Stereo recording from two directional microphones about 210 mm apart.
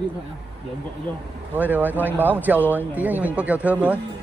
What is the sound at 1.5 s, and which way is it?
A man's voice, 10° right (ahead or behind).